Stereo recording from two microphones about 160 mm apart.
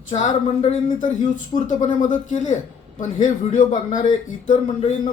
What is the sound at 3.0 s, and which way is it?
Speech, 55° left (ahead or behind).